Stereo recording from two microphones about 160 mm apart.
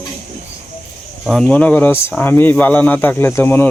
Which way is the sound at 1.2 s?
5° left (ahead or behind).